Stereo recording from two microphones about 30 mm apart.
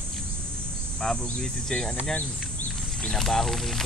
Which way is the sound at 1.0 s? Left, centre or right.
Left.